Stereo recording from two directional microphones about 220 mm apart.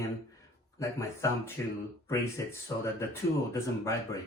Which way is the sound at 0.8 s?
15° left (ahead or behind).